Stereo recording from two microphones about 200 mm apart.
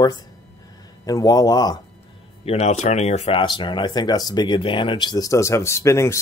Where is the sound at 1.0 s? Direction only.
20° left (ahead or behind).